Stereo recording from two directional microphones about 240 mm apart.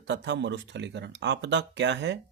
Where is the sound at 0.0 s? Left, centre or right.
Right.